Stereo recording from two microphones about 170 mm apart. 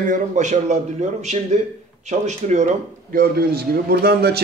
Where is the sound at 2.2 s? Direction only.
45° right (ahead or behind).